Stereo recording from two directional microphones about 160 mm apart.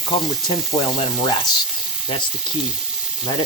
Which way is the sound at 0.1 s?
30° left (ahead or behind).